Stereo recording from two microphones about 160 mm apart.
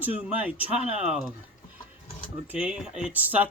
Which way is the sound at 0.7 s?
45° right (ahead or behind).